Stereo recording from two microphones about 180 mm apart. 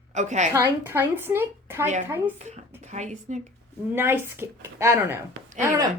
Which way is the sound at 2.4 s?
40° right (ahead or behind).